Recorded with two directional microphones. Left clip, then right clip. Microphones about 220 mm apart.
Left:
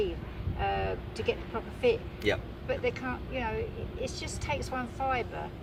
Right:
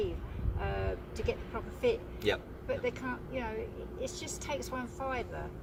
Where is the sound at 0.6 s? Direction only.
15° right (ahead or behind).